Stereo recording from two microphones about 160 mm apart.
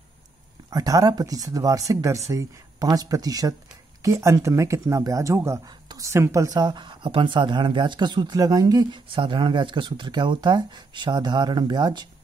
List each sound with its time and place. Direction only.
0.7 s speech: 25° right (ahead or behind)